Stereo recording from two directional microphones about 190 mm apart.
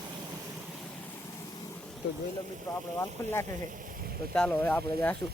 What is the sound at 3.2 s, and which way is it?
Speech, 15° left (ahead or behind).